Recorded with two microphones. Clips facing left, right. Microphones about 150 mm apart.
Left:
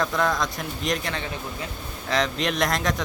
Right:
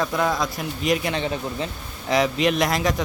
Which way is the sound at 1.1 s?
25° right (ahead or behind).